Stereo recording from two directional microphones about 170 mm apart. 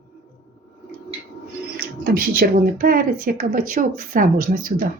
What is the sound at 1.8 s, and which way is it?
Speech, 60° right (ahead or behind).